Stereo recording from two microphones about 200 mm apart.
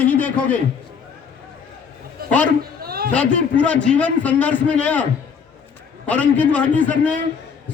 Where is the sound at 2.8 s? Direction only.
50° right (ahead or behind).